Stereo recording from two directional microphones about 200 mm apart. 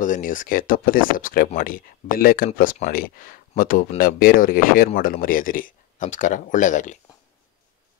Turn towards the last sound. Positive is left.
turn(degrees=40)  # may be behind; listen again after turning